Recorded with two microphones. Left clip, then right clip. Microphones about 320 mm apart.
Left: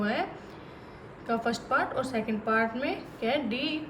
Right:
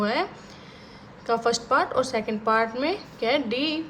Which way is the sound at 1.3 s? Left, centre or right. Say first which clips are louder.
Right 6 dB; centre.